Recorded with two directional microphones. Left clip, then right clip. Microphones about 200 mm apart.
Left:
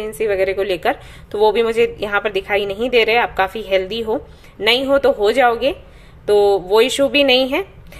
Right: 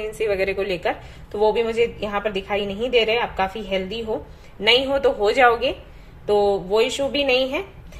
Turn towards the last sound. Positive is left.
turn(degrees=45)  # may be behind; listen again after turning